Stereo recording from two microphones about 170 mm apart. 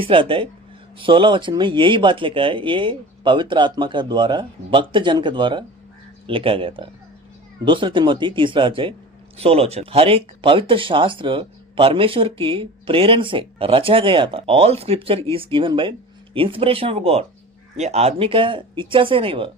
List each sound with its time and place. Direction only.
0.0 s speech: 30° right (ahead or behind)